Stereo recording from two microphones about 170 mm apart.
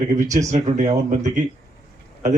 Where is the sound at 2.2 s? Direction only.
45° right (ahead or behind).